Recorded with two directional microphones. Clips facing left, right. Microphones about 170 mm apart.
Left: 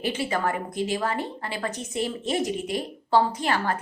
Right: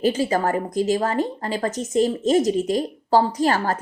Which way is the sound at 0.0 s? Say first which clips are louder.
Right 6 dB; 40° right (ahead or behind).